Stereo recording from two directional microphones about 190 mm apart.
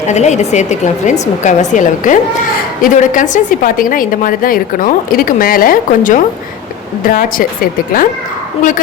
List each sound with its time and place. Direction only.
0.1 s a woman's voice: 35° left (ahead or behind)